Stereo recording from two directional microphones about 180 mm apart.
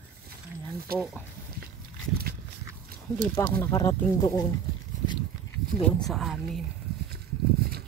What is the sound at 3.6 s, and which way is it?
Speech, 20° left (ahead or behind).